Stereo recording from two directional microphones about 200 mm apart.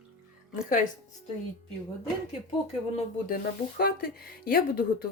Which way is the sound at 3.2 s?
50° left (ahead or behind).